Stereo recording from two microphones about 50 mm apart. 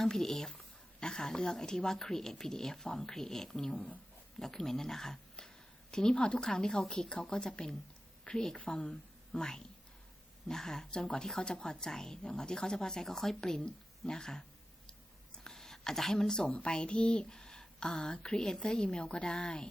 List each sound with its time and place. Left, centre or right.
0.0 s a woman's voice: centre
14.8 s a sound: centre
16.5 s a woman's voice: centre